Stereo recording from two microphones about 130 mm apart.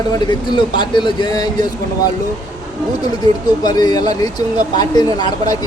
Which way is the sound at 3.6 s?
30° left (ahead or behind).